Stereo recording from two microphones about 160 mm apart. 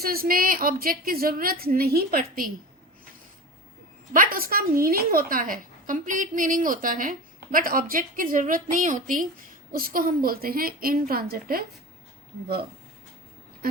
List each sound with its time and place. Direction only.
0.0 s a woman's voice: 70° right (ahead or behind)
4.1 s a woman's voice: 60° right (ahead or behind)